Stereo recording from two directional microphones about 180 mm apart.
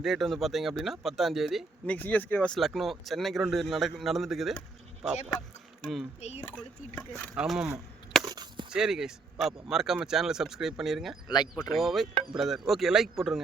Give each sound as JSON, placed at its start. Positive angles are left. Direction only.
{"t": 0.0, "sound": "speech", "side_deg": 0}
{"t": 5.8, "sound": "speech", "side_deg": 0}
{"t": 6.1, "sound": "speech", "side_deg": 35}
{"t": 6.9, "sound": "speech", "side_deg": 10}
{"t": 7.3, "sound": "wood", "side_deg": -5}
{"t": 8.2, "sound": "a sound", "side_deg": -20}
{"t": 8.7, "sound": "speech", "side_deg": -5}